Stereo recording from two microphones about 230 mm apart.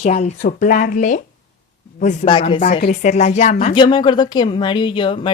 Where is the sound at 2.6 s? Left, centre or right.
Left.